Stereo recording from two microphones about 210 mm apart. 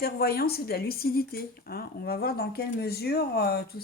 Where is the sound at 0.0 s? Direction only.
45° left (ahead or behind).